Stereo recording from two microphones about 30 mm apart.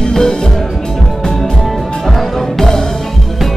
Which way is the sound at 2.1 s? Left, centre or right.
Centre.